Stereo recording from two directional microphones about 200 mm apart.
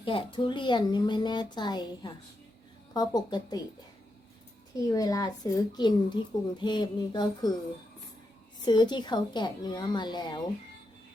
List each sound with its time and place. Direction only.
0.0 s a child's voice: 25° left (ahead or behind)
4.9 s a child's voice: 20° left (ahead or behind)
8.6 s a child's voice: 20° left (ahead or behind)